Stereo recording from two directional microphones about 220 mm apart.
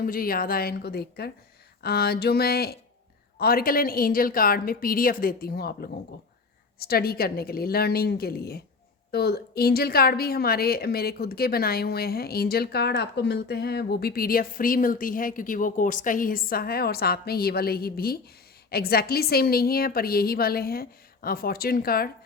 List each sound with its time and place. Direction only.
0.0 s a woman's voice: 40° left (ahead or behind)